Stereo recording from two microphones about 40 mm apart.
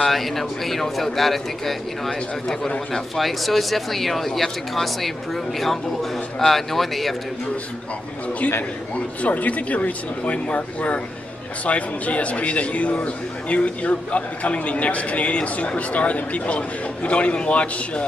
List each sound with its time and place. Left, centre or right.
0.0 s speech: centre
8.9 s a man's voice: left